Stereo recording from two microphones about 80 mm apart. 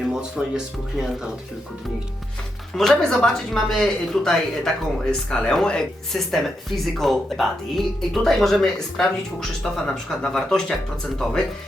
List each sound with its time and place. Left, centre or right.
0.0 s speech: centre
2.7 s speech: centre